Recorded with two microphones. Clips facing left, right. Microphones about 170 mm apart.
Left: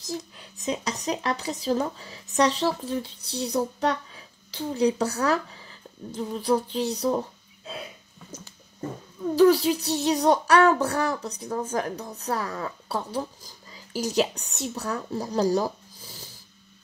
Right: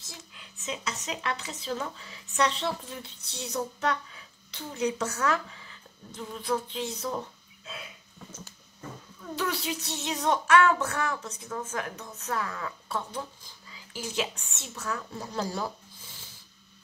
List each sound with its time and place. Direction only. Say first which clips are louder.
0.0 s speech: left 15 dB; 40° left (ahead or behind)
9.2 s speech: left 14 dB; 35° left (ahead or behind)